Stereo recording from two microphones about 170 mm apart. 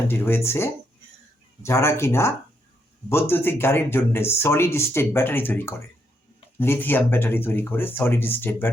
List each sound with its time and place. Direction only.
0.1 s speech: 15° left (ahead or behind)